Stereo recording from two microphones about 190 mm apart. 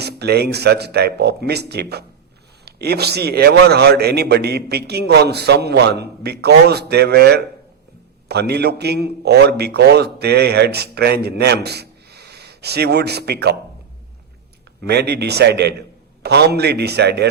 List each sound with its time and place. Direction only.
0.0 s a man's voice: 60° right (ahead or behind)
14.8 s a man's voice: 60° right (ahead or behind)